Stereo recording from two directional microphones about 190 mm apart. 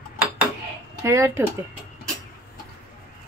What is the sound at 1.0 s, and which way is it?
Speech, 15° right (ahead or behind).